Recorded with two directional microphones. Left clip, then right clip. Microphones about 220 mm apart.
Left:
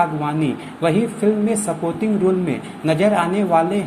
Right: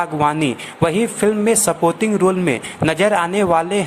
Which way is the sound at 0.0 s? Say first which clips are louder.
Right 2 dB; 40° right (ahead or behind).